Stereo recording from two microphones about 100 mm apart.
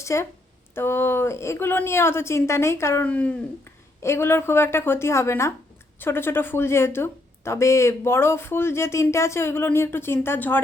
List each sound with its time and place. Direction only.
0.0 s a woman's voice: 30° left (ahead or behind)
3.0 s speech: 15° left (ahead or behind)
4.0 s a woman's voice: 25° left (ahead or behind)